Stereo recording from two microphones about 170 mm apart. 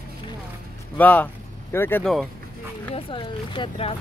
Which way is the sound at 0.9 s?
10° left (ahead or behind).